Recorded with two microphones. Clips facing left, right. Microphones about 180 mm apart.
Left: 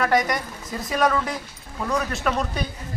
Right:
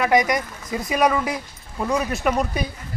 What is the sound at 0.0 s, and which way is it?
Speech, centre (ahead or behind).